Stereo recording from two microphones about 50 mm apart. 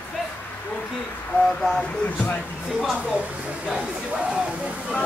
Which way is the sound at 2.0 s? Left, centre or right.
Left.